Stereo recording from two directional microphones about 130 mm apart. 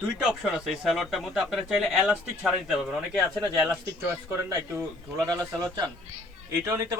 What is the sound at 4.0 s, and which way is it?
Speech, 15° right (ahead or behind).